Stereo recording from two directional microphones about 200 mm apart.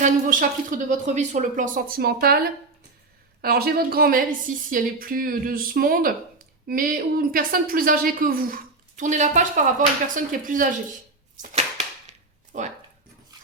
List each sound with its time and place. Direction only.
0.0 s a sound: 40° right (ahead or behind)
0.9 s a woman's voice: 35° right (ahead or behind)
3.4 s a woman's voice: 50° right (ahead or behind)
12.5 s a woman's voice: 40° right (ahead or behind)